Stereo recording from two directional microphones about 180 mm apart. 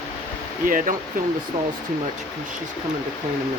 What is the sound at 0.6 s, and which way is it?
Speech, 50° right (ahead or behind).